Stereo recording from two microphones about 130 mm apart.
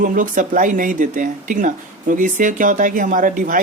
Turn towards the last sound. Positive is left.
turn(degrees=-90)